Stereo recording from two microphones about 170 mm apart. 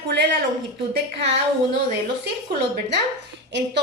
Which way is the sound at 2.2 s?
85° right.